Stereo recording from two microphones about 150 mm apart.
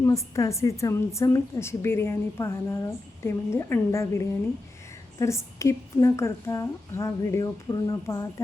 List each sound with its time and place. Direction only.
0.0 s a woman's voice: 20° left (ahead or behind)